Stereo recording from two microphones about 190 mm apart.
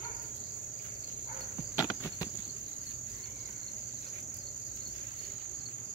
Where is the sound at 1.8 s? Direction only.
20° left (ahead or behind).